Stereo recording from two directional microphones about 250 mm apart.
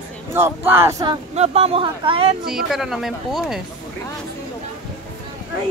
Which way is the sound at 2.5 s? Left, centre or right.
Centre.